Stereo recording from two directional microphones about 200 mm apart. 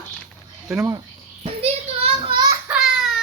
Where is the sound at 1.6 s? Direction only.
25° right (ahead or behind).